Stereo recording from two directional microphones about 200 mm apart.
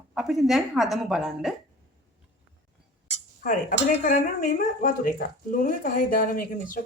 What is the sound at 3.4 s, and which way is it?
Speech, 40° left (ahead or behind).